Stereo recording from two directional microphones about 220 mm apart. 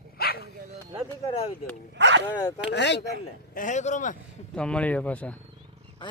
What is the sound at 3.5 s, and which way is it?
Speech, 35° left (ahead or behind).